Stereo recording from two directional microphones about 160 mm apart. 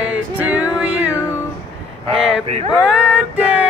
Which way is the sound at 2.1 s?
Centre (ahead or behind).